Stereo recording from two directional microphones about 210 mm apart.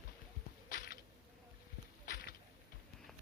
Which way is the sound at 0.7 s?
45° left (ahead or behind).